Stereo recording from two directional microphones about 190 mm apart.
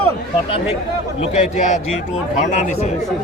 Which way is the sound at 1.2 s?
40° left (ahead or behind).